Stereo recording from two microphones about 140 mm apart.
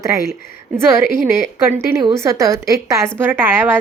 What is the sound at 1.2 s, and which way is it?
A woman's voice, 20° right (ahead or behind).